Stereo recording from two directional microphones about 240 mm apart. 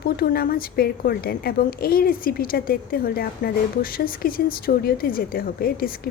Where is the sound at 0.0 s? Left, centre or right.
Left.